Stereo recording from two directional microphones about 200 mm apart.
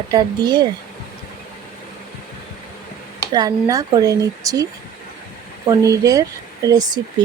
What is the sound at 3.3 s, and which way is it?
A woman's voice, 20° right (ahead or behind).